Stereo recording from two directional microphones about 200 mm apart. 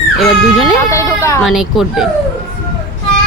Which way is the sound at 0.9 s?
15° left (ahead or behind).